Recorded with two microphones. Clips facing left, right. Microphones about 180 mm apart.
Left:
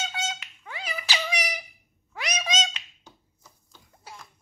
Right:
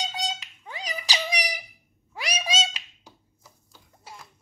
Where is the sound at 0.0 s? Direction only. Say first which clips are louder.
Right 1 dB; 15° right (ahead or behind).